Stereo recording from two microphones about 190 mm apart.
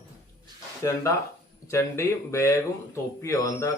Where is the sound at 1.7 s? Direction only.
15° left (ahead or behind).